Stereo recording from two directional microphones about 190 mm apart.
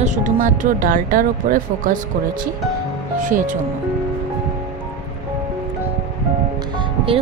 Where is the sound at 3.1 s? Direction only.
40° right (ahead or behind).